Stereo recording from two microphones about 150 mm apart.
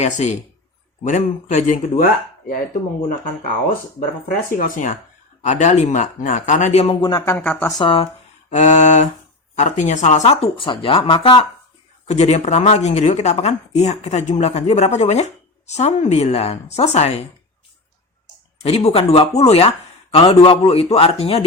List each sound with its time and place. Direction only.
0.0 s speech: 50° left (ahead or behind)
4.5 s speech: 65° left (ahead or behind)
5.4 s speech: 50° left (ahead or behind)
6.8 s speech: 30° left (ahead or behind)
7.2 s speech: 15° left (ahead or behind)
7.8 s a man's voice: 35° left (ahead or behind)
8.4 s a sound: 50° left (ahead or behind)
9.6 s speech: 55° left (ahead or behind); by 11.4 s 35° left (ahead or behind)
12.0 s speech: 45° left (ahead or behind)
18.6 s a man's voice: 45° left (ahead or behind)